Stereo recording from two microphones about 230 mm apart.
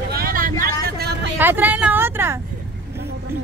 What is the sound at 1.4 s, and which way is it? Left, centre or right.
Speech, centre.